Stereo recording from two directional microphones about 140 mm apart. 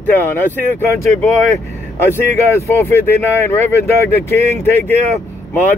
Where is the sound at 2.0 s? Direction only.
15° left (ahead or behind).